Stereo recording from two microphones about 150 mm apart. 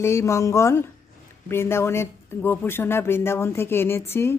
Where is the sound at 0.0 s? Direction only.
20° left (ahead or behind).